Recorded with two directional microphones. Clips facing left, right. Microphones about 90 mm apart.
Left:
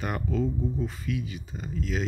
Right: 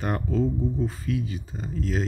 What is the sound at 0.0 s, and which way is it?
Speech, 35° right (ahead or behind).